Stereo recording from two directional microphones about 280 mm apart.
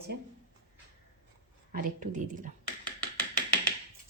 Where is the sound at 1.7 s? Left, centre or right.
Right.